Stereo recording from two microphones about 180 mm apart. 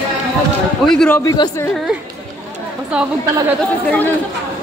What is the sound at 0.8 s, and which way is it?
Speech, 5° left (ahead or behind).